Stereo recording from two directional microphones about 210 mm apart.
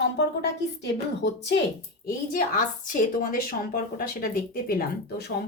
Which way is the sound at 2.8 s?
40° left (ahead or behind).